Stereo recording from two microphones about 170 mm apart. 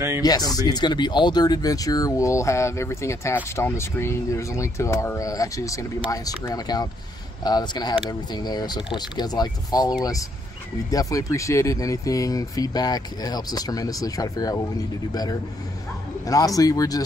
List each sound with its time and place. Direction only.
0.2 s speech: 20° left (ahead or behind)
16.3 s speech: 20° left (ahead or behind)